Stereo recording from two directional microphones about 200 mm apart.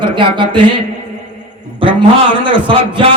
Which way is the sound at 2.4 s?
25° right (ahead or behind).